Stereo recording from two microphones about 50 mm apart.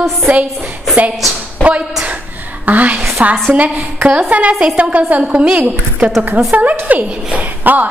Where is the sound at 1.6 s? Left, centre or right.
Right.